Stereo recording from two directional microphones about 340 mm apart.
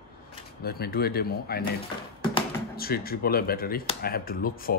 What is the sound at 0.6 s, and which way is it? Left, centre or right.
Speech, left.